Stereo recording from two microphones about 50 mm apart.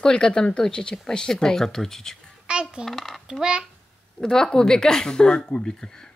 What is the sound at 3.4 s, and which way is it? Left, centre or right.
Speech, centre.